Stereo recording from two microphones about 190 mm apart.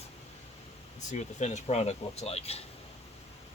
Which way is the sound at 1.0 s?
40° left (ahead or behind).